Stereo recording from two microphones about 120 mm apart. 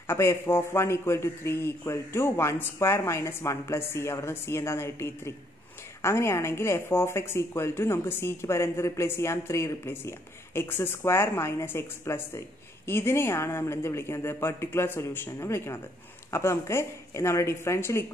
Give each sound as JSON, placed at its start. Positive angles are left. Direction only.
{"t": 0.0, "sound": "a woman's voice", "side_deg": 20}